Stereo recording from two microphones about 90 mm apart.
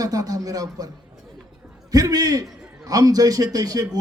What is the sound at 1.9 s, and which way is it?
A man's voice, 45° right (ahead or behind).